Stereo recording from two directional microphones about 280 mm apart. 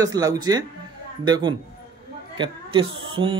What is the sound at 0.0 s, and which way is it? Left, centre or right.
Speech, centre.